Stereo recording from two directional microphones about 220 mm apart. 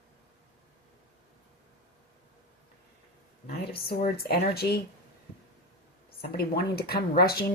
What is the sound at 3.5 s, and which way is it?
Speech, 45° left (ahead or behind).